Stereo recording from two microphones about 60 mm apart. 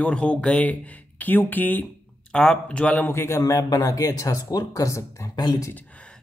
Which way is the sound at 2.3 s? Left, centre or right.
Centre.